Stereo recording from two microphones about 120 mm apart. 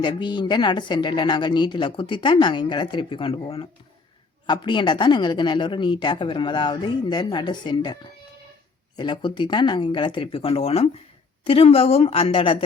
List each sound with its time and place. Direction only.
0.0 s speech: 40° left (ahead or behind)
9.0 s speech: 40° left (ahead or behind)